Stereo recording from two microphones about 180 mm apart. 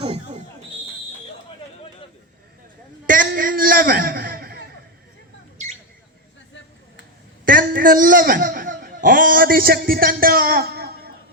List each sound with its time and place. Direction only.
0.0 s fire alarm: 35° right (ahead or behind)
3.1 s a sound: 50° right (ahead or behind)
7.4 s a man's voice: 50° right (ahead or behind)